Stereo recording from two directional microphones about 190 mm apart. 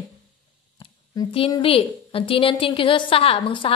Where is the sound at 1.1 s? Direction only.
30° left (ahead or behind).